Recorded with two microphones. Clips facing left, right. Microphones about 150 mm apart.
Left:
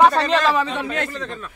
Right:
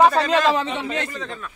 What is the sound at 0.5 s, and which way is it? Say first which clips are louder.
Speech: left 2 dB; 20° right (ahead or behind).